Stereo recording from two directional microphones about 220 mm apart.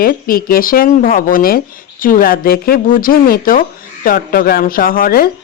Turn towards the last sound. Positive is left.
turn(degrees=40)  # may be behind; listen again after turning